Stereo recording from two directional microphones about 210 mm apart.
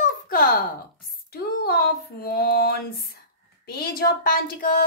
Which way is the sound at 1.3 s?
45° left (ahead or behind).